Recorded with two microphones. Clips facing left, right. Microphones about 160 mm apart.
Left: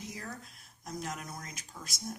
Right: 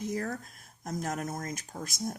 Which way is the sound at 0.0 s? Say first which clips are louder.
Right 10 dB; 50° right (ahead or behind).